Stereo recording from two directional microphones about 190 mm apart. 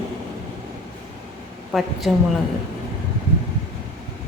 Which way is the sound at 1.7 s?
Centre (ahead or behind).